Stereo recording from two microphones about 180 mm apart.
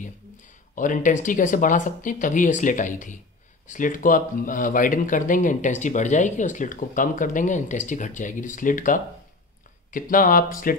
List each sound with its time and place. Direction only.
0.7 s speech: 45° left (ahead or behind)